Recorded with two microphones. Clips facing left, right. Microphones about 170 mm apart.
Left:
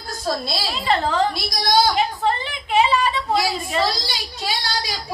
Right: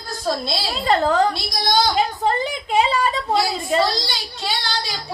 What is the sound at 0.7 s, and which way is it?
Speech, 45° right (ahead or behind).